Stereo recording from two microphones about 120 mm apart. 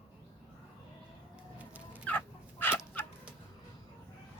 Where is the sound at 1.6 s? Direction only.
10° right (ahead or behind).